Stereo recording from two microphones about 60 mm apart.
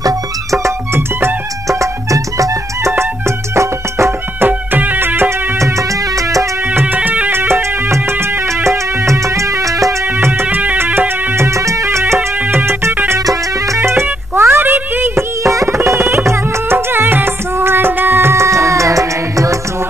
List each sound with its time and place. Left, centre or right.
0.0 s music: right
3.0 s music: right
4.4 s music: right
6.7 s music: right
7.0 s music: right
8.6 s music: right
10.2 s music: right
11.3 s music: right
15.4 s music: right
18.3 s music: right